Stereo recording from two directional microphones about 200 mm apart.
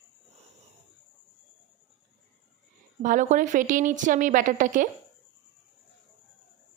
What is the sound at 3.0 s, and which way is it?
A woman's voice, 40° right (ahead or behind).